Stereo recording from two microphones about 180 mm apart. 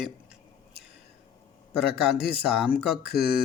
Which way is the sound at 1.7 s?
Centre (ahead or behind).